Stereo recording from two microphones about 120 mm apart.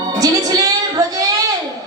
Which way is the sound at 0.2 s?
30° right (ahead or behind).